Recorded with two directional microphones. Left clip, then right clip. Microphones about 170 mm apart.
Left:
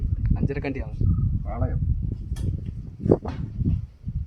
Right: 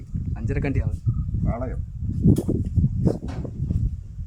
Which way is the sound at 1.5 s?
80° right.